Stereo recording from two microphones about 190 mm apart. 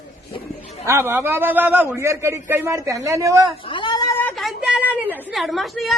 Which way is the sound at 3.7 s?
25° left (ahead or behind).